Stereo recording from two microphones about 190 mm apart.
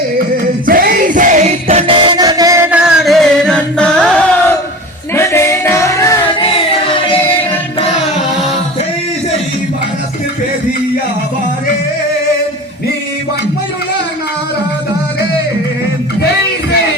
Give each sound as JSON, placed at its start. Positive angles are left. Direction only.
{"t": 0.6, "sound": "music", "side_deg": -50}
{"t": 2.0, "sound": "music", "side_deg": -20}
{"t": 6.2, "sound": "music", "side_deg": 30}